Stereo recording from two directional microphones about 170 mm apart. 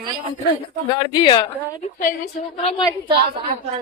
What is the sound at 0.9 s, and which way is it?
Speech, 25° left (ahead or behind).